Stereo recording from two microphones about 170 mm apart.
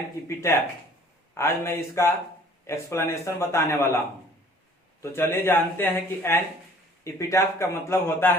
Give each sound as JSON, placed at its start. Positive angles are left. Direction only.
{"t": 1.4, "sound": "a man's voice", "side_deg": 15}
{"t": 5.0, "sound": "a man's voice", "side_deg": 15}